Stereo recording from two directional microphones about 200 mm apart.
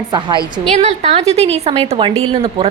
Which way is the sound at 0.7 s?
35° right (ahead or behind).